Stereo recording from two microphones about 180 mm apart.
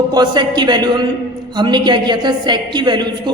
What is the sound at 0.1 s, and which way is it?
A woman's voice, 25° right (ahead or behind).